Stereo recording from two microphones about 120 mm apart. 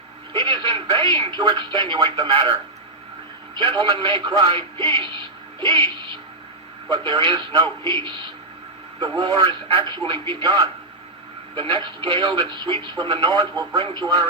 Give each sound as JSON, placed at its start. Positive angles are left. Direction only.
{"t": 0.3, "sound": "speech", "side_deg": -40}
{"t": 3.6, "sound": "a man's voice", "side_deg": -45}
{"t": 6.9, "sound": "a man's voice", "side_deg": -40}
{"t": 9.0, "sound": "a man's voice", "side_deg": -40}